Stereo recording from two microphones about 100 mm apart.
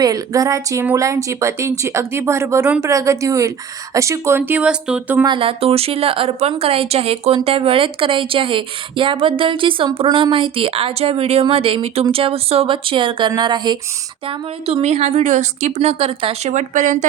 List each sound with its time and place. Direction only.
0.0 s speech: 35° right (ahead or behind); by 5.2 s 15° right (ahead or behind)
5.2 s a woman's voice: 60° right (ahead or behind)
14.3 s a woman's voice: 80° right